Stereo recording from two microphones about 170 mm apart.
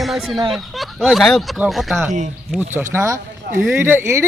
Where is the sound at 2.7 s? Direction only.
15° right (ahead or behind).